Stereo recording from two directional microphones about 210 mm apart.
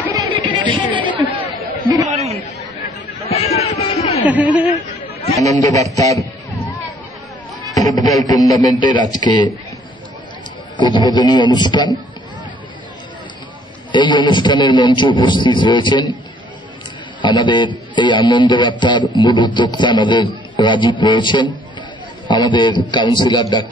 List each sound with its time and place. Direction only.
0.1 s chatter: 20° right (ahead or behind)
3.5 s a sound: 30° left (ahead or behind)
4.3 s speech: 5° right (ahead or behind)
5.6 s speech: 15° left (ahead or behind)
7.7 s speech: 15° left (ahead or behind)
10.8 s a man's voice: 20° left (ahead or behind)
13.9 s a man's voice: 20° left (ahead or behind)
17.2 s a man's voice: 20° left (ahead or behind)